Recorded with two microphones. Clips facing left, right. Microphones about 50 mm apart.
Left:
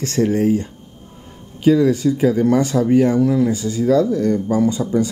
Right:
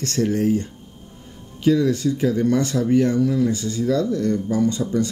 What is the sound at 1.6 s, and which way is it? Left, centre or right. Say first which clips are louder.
Speech: left 4 dB; left.